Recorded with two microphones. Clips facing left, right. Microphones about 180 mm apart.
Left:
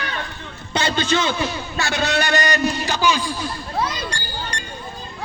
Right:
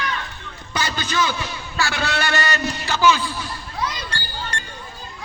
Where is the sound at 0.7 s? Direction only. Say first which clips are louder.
Left 3 dB; 25° left (ahead or behind).